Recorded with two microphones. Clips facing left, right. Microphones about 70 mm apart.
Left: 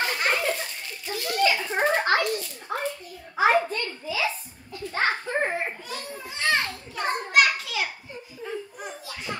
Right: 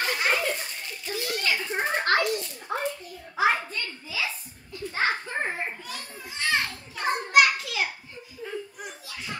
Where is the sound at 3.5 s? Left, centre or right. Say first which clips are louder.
Left 9 dB; left.